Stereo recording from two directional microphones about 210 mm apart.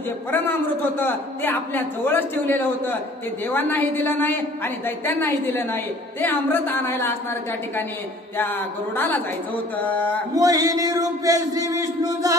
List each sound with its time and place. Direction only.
0.3 s a man's voice: 10° left (ahead or behind)
8.4 s a man's voice: 10° left (ahead or behind)
10.3 s a sound: 15° right (ahead or behind)